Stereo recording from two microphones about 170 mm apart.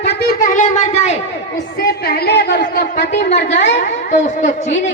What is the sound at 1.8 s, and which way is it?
A man's voice, 70° left (ahead or behind).